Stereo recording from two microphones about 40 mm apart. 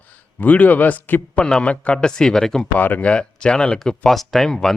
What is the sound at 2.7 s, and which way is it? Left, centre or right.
Speech, left.